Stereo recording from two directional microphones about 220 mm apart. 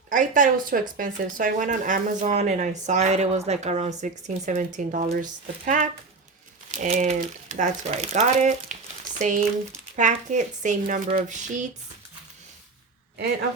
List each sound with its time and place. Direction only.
0.1 s speech: 35° right (ahead or behind)